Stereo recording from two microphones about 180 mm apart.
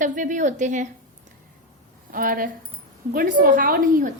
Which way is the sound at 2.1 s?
50° right (ahead or behind).